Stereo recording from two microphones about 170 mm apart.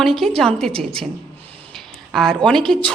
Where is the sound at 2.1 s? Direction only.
Centre (ahead or behind).